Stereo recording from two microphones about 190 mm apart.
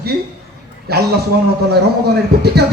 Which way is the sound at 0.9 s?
55° right (ahead or behind).